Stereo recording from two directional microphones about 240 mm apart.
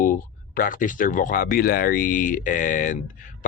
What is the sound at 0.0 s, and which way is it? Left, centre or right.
Speech, left.